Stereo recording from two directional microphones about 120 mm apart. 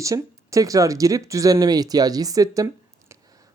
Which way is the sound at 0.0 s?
25° right (ahead or behind).